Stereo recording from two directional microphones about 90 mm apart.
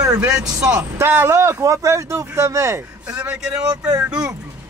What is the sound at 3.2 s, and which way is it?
Speech, 15° right (ahead or behind).